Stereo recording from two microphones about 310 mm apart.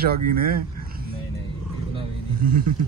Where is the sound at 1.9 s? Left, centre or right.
Right.